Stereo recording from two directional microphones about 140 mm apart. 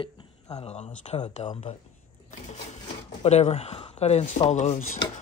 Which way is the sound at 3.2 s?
50° left (ahead or behind).